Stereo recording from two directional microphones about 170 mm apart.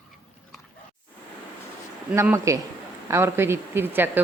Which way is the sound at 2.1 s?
15° right (ahead or behind).